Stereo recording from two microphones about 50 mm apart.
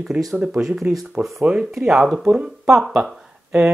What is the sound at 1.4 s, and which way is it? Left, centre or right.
Speech, right.